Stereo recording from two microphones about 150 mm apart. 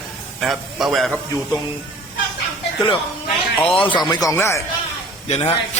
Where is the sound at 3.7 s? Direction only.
35° left (ahead or behind).